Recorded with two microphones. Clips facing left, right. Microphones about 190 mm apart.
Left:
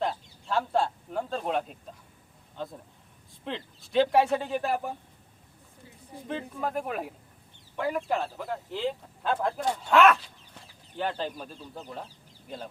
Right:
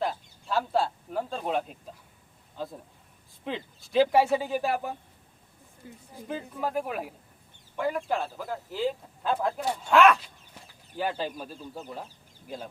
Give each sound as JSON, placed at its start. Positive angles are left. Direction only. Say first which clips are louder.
{"t": 0.0, "sound": "a sound", "louder": "even", "side_deg": -5}
{"t": 2.6, "sound": "speech", "louder": "right 1 dB", "side_deg": -5}
{"t": 5.8, "sound": "speech", "louder": "right 7 dB", "side_deg": -50}
{"t": 6.2, "sound": "speech", "louder": "even", "side_deg": -5}